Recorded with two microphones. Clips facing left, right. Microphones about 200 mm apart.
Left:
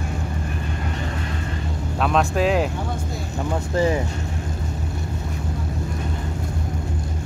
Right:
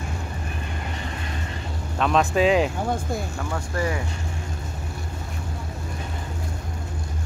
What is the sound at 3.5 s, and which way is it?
Speech, 25° left (ahead or behind).